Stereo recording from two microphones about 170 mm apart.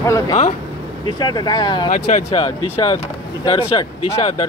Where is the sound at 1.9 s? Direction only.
45° left (ahead or behind).